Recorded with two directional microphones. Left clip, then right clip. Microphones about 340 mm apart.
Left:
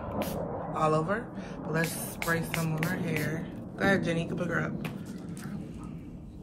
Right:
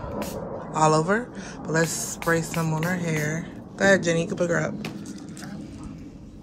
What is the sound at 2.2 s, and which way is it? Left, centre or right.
A woman's voice, right.